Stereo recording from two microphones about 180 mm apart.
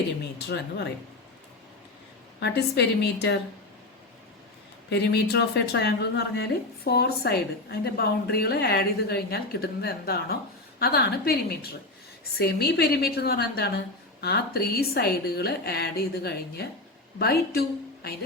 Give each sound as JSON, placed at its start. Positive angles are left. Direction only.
{"t": 2.4, "sound": "a woman's voice", "side_deg": 65}
{"t": 4.9, "sound": "a woman's voice", "side_deg": 65}